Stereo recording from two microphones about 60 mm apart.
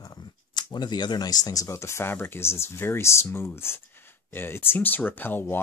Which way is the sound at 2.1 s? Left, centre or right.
Left.